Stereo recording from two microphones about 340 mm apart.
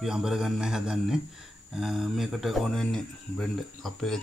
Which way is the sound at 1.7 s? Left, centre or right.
Centre.